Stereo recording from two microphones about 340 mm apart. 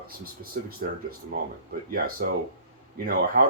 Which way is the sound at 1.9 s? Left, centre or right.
Right.